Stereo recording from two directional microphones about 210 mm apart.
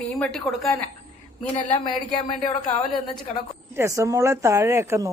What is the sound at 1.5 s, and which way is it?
Speech, 20° left (ahead or behind).